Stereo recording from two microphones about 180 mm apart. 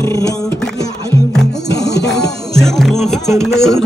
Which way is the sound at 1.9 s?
70° left (ahead or behind).